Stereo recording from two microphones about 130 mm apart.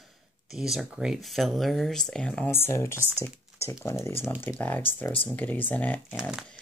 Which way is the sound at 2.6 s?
20° left (ahead or behind).